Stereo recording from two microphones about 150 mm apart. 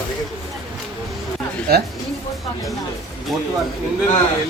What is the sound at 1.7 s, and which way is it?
Speech, 90° right.